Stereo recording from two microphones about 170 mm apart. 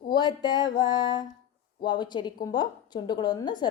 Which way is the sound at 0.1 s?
25° left (ahead or behind).